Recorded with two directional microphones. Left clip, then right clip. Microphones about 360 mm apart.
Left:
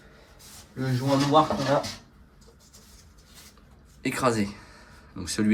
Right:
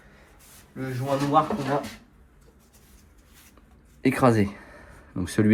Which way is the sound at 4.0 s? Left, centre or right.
Centre.